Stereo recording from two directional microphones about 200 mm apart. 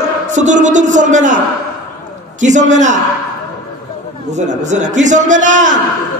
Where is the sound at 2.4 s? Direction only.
35° right (ahead or behind).